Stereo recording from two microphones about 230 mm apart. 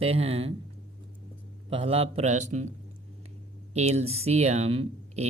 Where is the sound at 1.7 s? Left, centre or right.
Right.